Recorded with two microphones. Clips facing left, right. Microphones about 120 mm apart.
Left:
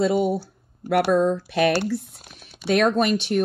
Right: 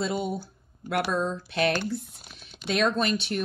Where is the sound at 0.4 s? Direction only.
70° left (ahead or behind).